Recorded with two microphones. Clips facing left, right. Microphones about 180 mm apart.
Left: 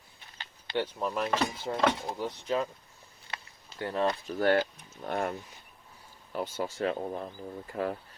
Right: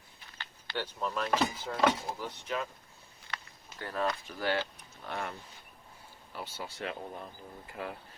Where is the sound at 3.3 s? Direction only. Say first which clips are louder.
Even; 25° left (ahead or behind).